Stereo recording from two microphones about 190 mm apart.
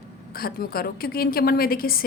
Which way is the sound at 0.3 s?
50° left (ahead or behind).